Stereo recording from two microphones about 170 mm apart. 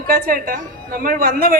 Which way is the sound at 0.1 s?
60° right (ahead or behind).